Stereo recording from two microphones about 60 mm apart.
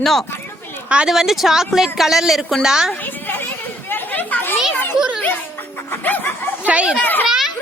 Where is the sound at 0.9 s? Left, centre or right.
Centre.